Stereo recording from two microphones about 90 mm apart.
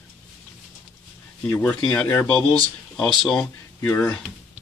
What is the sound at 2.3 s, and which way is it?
Speech, 15° left (ahead or behind).